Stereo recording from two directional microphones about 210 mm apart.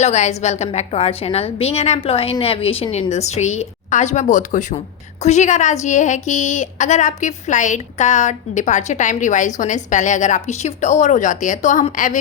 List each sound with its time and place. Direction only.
0.0 s a woman's voice: 35° left (ahead or behind)